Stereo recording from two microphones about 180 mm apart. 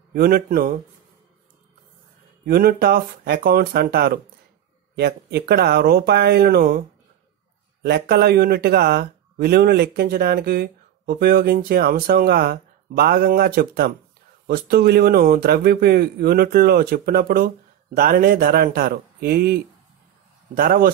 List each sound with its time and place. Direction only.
0.1 s speech: 55° right (ahead or behind)
2.4 s speech: 55° right (ahead or behind)
7.8 s speech: 65° right (ahead or behind)